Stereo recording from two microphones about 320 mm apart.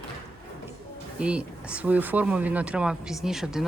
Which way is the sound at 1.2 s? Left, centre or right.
Centre.